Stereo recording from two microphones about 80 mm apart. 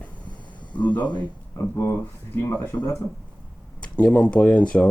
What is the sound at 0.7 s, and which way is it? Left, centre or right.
Speech, left.